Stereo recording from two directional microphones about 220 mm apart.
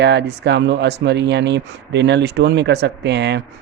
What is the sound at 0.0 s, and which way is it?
Speech, 50° right (ahead or behind).